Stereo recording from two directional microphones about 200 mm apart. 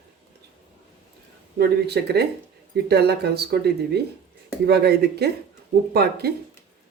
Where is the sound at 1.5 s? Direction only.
55° right (ahead or behind).